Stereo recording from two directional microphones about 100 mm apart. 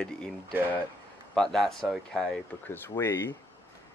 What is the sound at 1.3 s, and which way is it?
Speech, 5° left (ahead or behind).